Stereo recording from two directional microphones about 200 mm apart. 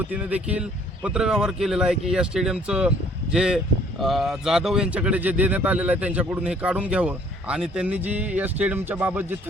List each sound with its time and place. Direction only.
0.0 s speech: 10° right (ahead or behind)